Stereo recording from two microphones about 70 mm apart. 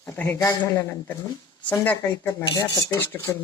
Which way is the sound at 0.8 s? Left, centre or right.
Left.